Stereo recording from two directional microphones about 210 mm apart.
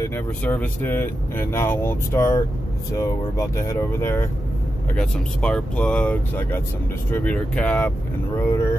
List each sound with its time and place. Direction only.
0.0 s speech: 10° left (ahead or behind)